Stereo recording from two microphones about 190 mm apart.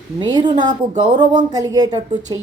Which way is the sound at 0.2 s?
25° right (ahead or behind).